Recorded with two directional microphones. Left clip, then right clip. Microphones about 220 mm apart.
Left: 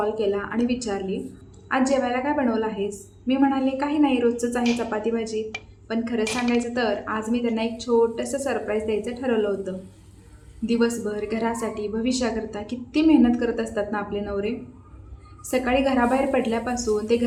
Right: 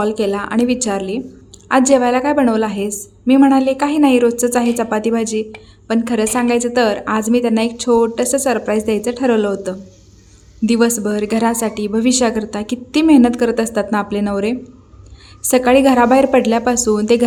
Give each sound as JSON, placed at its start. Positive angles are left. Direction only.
{"t": 0.0, "sound": "a woman's voice", "side_deg": -50}